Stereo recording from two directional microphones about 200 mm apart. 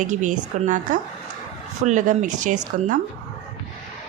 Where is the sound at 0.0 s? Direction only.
40° right (ahead or behind).